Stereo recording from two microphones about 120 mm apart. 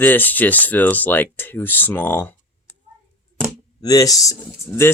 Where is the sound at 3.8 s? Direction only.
30° left (ahead or behind).